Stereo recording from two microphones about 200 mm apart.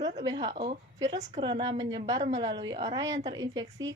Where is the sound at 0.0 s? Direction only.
35° right (ahead or behind).